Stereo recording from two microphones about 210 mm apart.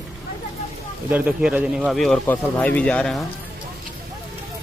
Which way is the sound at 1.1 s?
10° right (ahead or behind).